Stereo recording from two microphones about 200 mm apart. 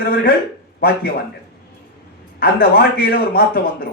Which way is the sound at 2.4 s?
50° left (ahead or behind).